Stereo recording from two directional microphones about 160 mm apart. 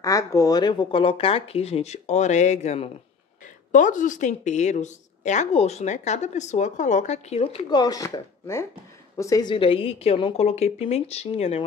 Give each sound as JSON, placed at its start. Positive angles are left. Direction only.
{"t": 0.0, "sound": "a woman's voice", "side_deg": 20}
{"t": 7.7, "sound": "speech", "side_deg": 25}